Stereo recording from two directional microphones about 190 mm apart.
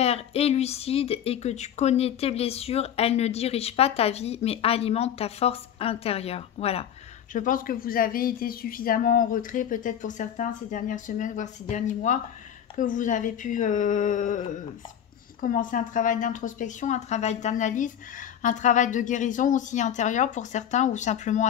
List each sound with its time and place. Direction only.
0.0 s speech: 30° left (ahead or behind)
7.3 s speech: 45° left (ahead or behind)